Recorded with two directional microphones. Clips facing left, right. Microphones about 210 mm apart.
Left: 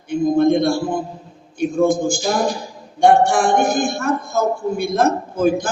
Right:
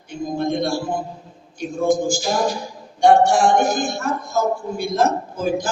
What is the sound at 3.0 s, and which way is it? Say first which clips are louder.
A man's voice: even; 55° left (ahead or behind).